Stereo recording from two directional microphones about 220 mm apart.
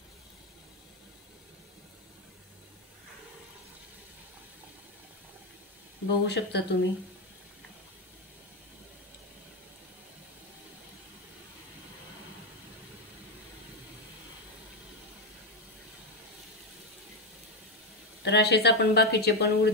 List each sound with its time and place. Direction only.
6.2 s speech: 50° left (ahead or behind)
18.2 s speech: 50° left (ahead or behind)